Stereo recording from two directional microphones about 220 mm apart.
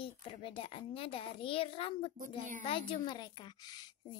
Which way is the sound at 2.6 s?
25° left (ahead or behind).